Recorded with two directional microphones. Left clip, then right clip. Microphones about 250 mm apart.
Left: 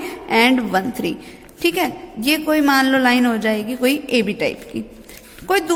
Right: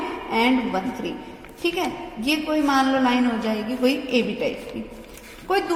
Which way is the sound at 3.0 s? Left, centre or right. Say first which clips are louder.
Left 5 dB; left.